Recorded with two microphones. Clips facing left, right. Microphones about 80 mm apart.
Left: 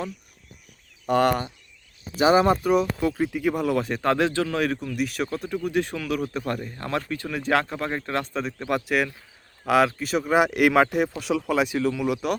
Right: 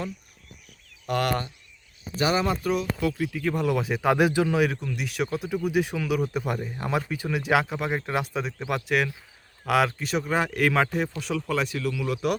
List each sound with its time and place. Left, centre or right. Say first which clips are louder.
1.0 s speech: left 5 dB; left
3.3 s speech: left 2 dB; centre
4.8 s speech: left 2 dB; centre
11.8 s speech: left 5 dB; left